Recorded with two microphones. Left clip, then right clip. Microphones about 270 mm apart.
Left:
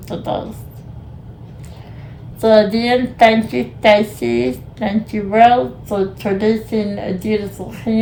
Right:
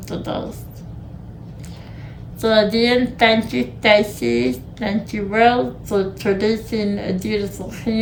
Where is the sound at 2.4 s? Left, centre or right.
Centre.